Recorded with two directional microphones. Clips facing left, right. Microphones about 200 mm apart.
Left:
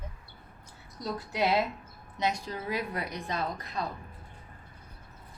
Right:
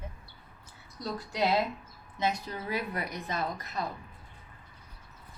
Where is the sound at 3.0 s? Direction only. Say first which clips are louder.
Even; centre (ahead or behind).